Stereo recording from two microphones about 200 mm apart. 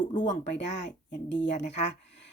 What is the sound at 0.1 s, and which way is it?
Speech, 35° left (ahead or behind).